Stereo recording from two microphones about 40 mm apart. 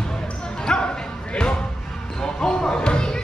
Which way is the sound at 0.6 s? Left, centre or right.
Left.